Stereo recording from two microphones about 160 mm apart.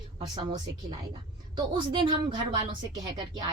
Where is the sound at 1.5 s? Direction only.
30° right (ahead or behind).